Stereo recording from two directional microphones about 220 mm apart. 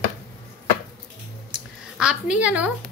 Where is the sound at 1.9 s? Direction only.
5° right (ahead or behind).